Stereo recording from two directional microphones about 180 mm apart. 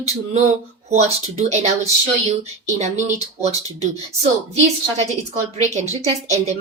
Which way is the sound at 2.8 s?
40° right (ahead or behind).